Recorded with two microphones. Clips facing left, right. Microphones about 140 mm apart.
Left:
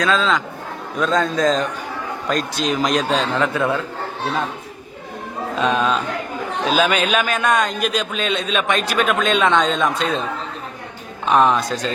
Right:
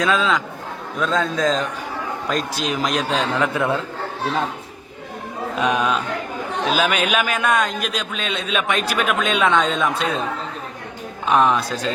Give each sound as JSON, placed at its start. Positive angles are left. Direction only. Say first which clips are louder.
{"t": 0.0, "sound": "a man's voice", "louder": "left 1 dB", "side_deg": -10}
{"t": 3.5, "sound": "speech", "louder": "left 1 dB", "side_deg": -20}
{"t": 5.5, "sound": "a man's voice", "louder": "left 1 dB", "side_deg": -10}
{"t": 11.3, "sound": "a man's voice", "louder": "left 1 dB", "side_deg": 0}